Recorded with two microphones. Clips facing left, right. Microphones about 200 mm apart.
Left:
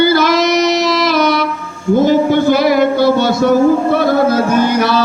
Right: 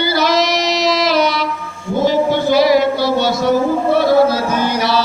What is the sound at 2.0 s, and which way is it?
Speech, 50° left (ahead or behind).